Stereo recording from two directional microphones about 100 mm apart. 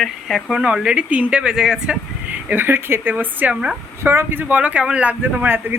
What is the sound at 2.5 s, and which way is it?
A woman's voice, 20° right (ahead or behind).